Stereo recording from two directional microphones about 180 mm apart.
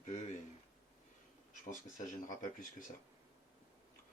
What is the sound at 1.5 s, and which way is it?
Speech, 45° left (ahead or behind).